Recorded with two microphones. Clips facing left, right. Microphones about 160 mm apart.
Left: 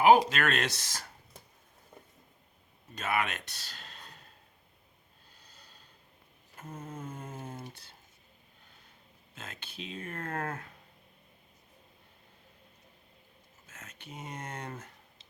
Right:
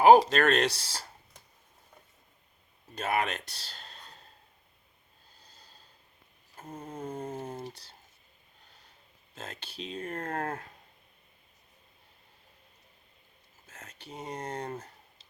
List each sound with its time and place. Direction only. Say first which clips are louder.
0.3 s speech: right 6 dB; 40° right (ahead or behind)
3.0 s speech: right 2 dB; 35° right (ahead or behind)
5.4 s snort: right 1 dB; 40° right (ahead or behind)
6.6 s mantra: right 2 dB; 35° right (ahead or behind)
9.3 s speech: right 3 dB; 35° right (ahead or behind)
13.7 s a sound: right 2 dB; 35° right (ahead or behind)